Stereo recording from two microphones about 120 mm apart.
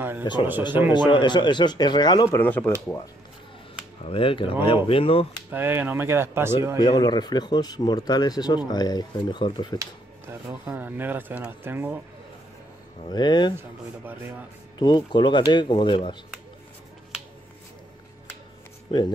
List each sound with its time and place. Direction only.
0.2 s speech: 40° left (ahead or behind)
2.2 s speech: 15° left (ahead or behind)
4.0 s speech: 50° left (ahead or behind)
5.5 s speech: 15° right (ahead or behind)
6.8 s speech: 35° left (ahead or behind)
10.5 s speech: 15° right (ahead or behind)
13.1 s speech: 40° left (ahead or behind)
13.6 s speech: 20° right (ahead or behind)
14.8 s speech: 40° left (ahead or behind)
18.9 s speech: 35° left (ahead or behind)